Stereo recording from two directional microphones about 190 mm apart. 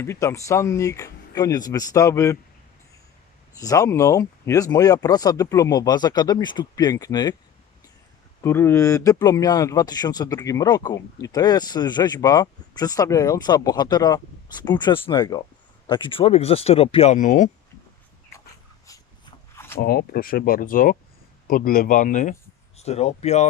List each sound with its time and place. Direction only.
0.0 s speech: 15° left (ahead or behind)
3.6 s speech: 20° left (ahead or behind)
8.4 s speech: 15° left (ahead or behind); by 17.5 s 40° left (ahead or behind)
19.5 s zipper: 15° left (ahead or behind)
19.8 s speech: 50° left (ahead or behind); by 23.5 s 35° left (ahead or behind)